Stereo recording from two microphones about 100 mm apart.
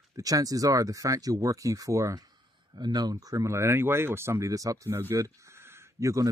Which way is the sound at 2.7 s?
45° right (ahead or behind).